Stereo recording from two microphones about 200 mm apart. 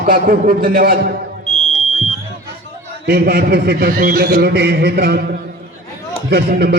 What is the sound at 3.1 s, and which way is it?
A man's voice, 50° right (ahead or behind).